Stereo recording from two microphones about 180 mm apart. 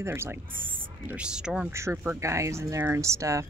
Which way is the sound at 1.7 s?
15° right (ahead or behind).